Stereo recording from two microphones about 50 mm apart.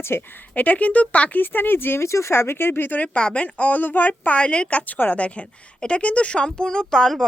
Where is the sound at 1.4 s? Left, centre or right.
Left.